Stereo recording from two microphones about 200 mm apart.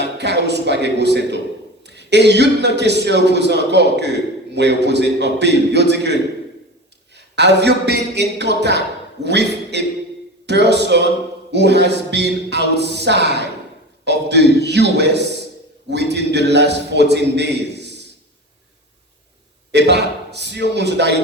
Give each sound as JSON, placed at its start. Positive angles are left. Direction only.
{"t": 0.0, "sound": "speech", "side_deg": -60}
{"t": 7.3, "sound": "speech", "side_deg": -60}
{"t": 19.7, "sound": "speech", "side_deg": -60}